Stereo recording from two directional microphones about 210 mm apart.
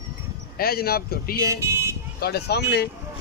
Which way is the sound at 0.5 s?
45° left (ahead or behind).